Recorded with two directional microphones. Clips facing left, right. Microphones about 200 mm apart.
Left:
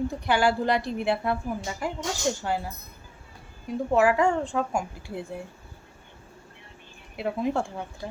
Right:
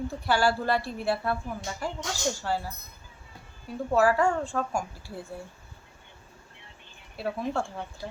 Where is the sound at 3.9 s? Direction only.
15° left (ahead or behind).